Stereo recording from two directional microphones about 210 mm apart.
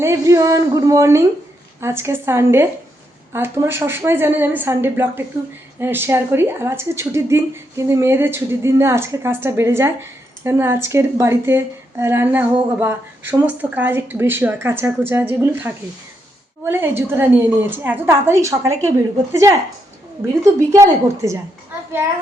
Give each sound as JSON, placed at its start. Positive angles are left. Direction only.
{"t": 0.0, "sound": "speech", "side_deg": -15}
{"t": 20.7, "sound": "speech", "side_deg": -15}